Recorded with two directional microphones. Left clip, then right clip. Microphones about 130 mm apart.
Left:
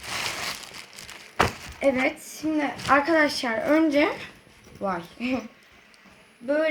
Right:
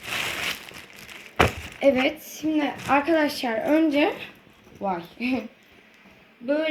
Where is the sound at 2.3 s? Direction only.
15° left (ahead or behind).